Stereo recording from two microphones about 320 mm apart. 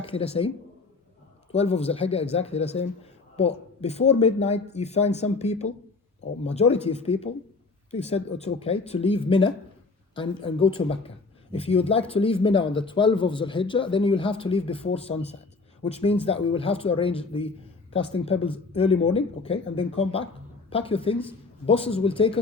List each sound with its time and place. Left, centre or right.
0.0 s speech: centre
1.5 s speech: centre